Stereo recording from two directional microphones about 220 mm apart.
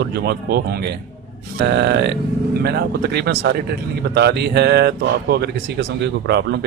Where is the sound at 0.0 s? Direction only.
50° right (ahead or behind).